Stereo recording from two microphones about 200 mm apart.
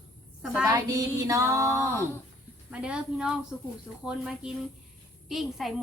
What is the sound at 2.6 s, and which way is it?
Speech, 5° right (ahead or behind).